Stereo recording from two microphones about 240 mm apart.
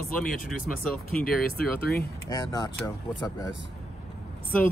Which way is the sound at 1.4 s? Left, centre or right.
Left.